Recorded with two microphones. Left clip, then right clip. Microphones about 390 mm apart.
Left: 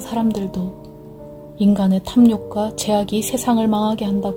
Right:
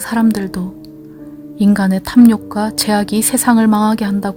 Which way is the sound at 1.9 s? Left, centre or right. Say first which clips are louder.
Right 6 dB; right.